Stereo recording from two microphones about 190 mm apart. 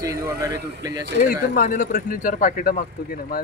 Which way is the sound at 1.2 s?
45° left (ahead or behind).